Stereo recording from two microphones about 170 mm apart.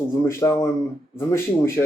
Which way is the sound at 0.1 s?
15° left (ahead or behind).